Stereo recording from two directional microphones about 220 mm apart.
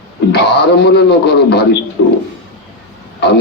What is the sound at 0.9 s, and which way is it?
Speech, 50° left (ahead or behind).